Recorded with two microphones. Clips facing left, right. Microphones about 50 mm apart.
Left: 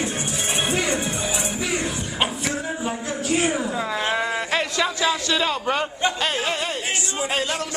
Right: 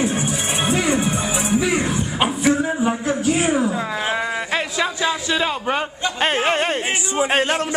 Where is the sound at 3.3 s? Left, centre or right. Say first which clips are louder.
Right 3 dB; centre.